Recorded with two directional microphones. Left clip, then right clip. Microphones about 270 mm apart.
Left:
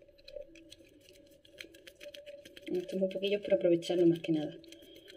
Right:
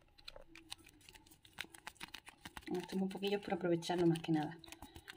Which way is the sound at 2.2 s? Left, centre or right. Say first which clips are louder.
Left 5 dB; right.